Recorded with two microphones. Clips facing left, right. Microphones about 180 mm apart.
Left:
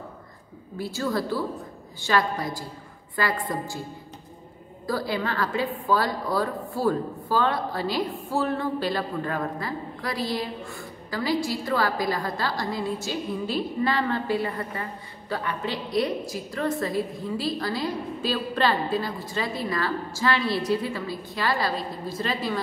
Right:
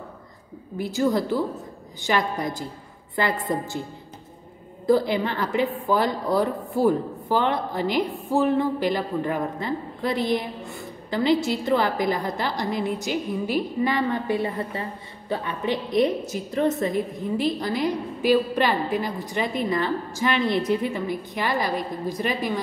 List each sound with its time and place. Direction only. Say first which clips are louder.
0.7 s a woman's voice: right 5 dB; 15° right (ahead or behind)
4.8 s a woman's voice: right 7 dB; 20° right (ahead or behind)